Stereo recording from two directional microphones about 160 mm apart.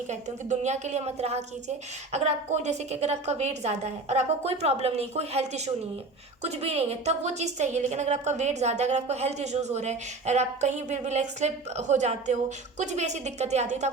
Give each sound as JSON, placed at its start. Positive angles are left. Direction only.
{"t": 0.1, "sound": "a woman's voice", "side_deg": -45}